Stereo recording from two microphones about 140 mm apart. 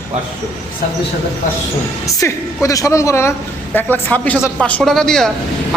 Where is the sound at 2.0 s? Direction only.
20° left (ahead or behind).